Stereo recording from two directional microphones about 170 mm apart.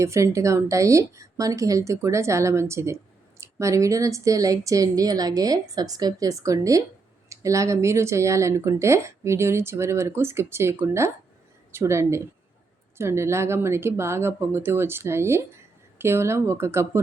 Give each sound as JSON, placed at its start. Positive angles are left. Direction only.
{"t": 0.0, "sound": "a woman's voice", "side_deg": -15}